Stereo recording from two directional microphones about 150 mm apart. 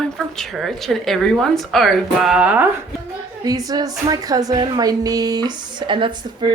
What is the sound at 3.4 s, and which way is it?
A woman's voice, 25° right (ahead or behind).